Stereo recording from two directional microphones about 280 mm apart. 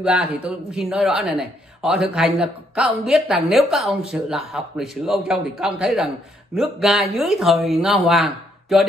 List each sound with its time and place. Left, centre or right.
0.0 s a man's voice: centre